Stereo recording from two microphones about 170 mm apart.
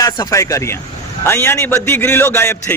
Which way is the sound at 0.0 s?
20° left (ahead or behind).